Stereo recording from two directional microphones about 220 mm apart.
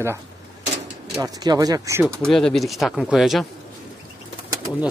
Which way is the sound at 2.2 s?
5° left (ahead or behind).